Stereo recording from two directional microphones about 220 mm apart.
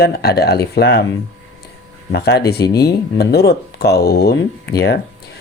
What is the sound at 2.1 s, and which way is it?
Speech, 45° left (ahead or behind).